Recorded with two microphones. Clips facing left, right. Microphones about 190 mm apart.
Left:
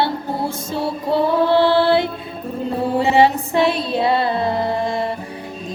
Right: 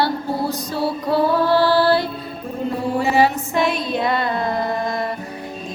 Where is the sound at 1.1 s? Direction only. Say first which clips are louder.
Left 1 dB; 20° left (ahead or behind).